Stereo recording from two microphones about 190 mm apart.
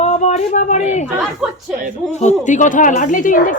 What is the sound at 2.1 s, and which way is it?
A woman's voice, 40° left (ahead or behind).